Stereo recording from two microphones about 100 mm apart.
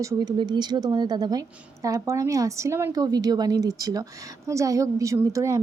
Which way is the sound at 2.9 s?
40° right (ahead or behind).